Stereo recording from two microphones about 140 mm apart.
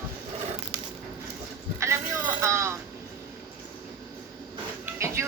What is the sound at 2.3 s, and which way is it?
Vehicle, 20° right (ahead or behind).